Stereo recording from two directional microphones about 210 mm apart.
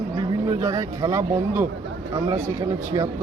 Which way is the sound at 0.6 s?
15° right (ahead or behind).